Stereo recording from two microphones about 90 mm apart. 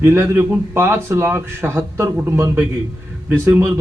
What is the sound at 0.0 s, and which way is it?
A man's voice, 30° right (ahead or behind).